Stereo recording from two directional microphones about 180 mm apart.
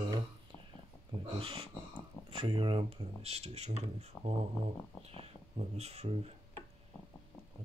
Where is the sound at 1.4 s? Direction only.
30° right (ahead or behind).